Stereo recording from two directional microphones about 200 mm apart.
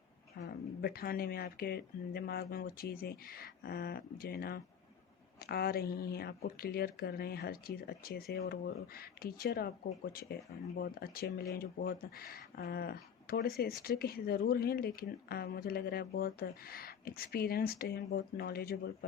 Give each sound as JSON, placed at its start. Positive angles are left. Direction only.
{"t": 0.3, "sound": "speech", "side_deg": 55}